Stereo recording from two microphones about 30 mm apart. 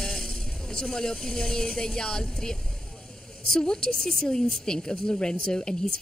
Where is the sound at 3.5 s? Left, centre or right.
Left.